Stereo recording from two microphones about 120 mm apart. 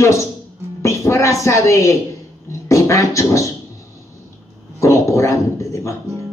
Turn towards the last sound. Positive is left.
turn(degrees=25)  # may be behind; listen again after turning